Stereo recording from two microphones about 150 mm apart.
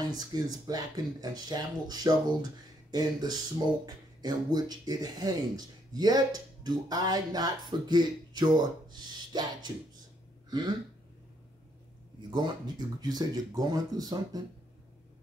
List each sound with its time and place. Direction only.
0.0 s speech: 25° right (ahead or behind)
12.2 s speech: 30° right (ahead or behind)